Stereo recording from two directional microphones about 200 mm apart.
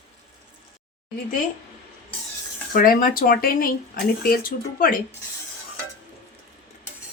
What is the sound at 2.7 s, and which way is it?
Speech, 45° left (ahead or behind).